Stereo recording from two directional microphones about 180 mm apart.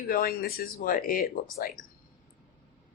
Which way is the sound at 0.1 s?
55° left (ahead or behind).